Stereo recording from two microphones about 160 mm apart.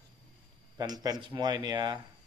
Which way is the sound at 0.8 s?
25° right (ahead or behind).